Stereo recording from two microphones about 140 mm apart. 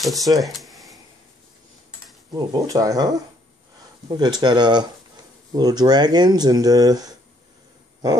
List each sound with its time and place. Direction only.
0.0 s speech: centre (ahead or behind)
0.4 s a sound: centre (ahead or behind)
2.3 s speech: 30° right (ahead or behind)
4.2 s speech: 30° right (ahead or behind)